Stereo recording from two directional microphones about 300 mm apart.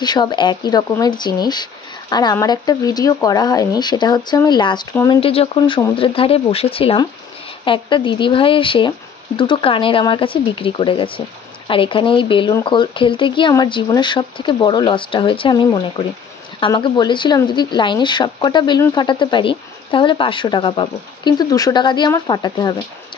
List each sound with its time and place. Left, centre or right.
0.0 s speech: centre